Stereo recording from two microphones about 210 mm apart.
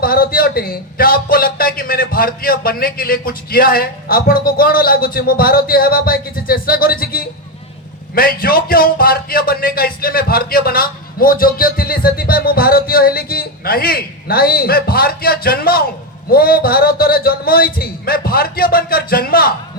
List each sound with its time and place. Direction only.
0.0 s a man's voice: 45° left (ahead or behind)